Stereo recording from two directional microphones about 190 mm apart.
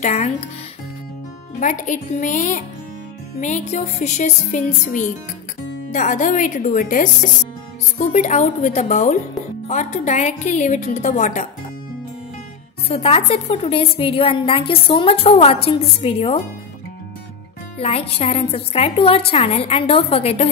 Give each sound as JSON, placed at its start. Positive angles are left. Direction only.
{"t": 0.0, "sound": "a woman's voice", "side_deg": 40}
{"t": 1.6, "sound": "a woman's voice", "side_deg": 40}
{"t": 12.8, "sound": "a woman's voice", "side_deg": 30}
{"t": 17.7, "sound": "a woman's voice", "side_deg": 30}